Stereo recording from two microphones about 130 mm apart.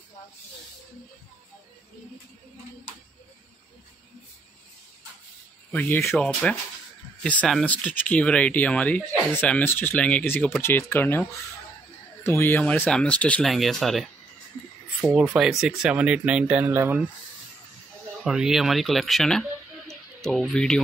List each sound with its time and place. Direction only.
5.7 s speech: 15° left (ahead or behind)
15.0 s speech: 10° right (ahead or behind)
18.2 s speech: 5° right (ahead or behind)
19.9 s a sound: centre (ahead or behind)